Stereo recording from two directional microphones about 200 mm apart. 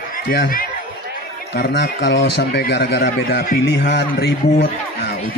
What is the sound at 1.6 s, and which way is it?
Speech, 55° left (ahead or behind).